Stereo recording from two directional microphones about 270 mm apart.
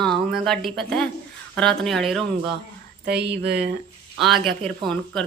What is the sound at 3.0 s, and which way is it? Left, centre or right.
Speech, right.